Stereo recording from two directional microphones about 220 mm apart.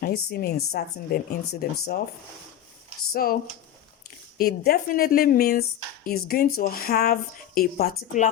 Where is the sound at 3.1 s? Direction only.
40° left (ahead or behind).